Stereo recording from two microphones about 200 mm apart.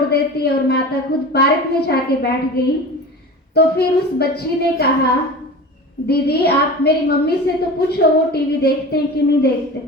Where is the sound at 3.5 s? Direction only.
55° left (ahead or behind).